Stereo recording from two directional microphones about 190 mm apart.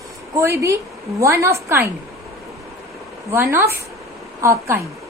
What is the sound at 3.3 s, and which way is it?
A woman's voice, 15° right (ahead or behind).